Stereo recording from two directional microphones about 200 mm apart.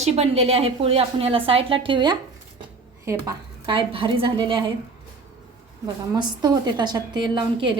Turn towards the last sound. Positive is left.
turn(degrees=-25)  # may be behind; listen again after turning